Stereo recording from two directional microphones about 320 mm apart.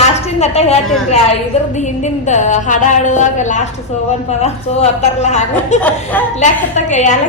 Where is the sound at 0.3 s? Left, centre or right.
Centre.